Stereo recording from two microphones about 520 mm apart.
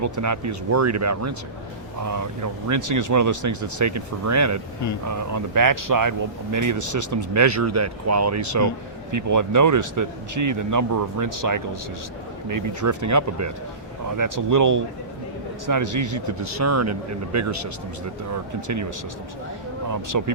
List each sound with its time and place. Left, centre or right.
0.0 s speech: right
19.9 s speech: right